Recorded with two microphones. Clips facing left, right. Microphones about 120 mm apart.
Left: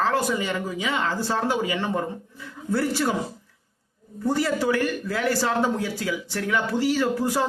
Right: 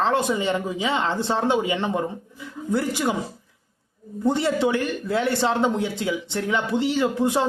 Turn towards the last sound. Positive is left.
turn(degrees=-25)  # may be behind; listen again after turning